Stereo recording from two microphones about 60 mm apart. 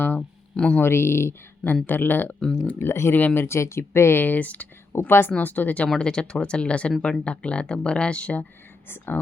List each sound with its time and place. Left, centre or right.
0.5 s speech: centre
0.8 s speech: left
1.7 s speech: left
2.7 s speech: left
3.2 s speech: left
3.4 s speech: left
4.9 s a woman's voice: left
5.4 s speech: left
5.9 s speech: centre